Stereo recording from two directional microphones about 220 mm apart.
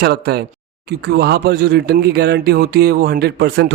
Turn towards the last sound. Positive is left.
turn(degrees=-50)  # may be behind; listen again after turning